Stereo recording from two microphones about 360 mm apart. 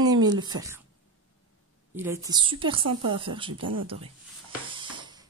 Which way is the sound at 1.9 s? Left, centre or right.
Centre.